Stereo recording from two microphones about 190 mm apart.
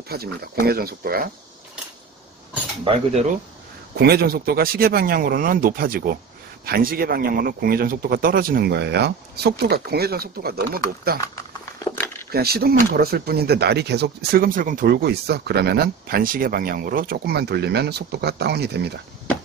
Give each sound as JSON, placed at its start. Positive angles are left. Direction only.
{"t": 0.1, "sound": "a man's voice", "side_deg": -55}
{"t": 3.9, "sound": "a man's voice", "side_deg": -55}
{"t": 11.8, "sound": "a sound", "side_deg": 15}
{"t": 12.3, "sound": "speech", "side_deg": -55}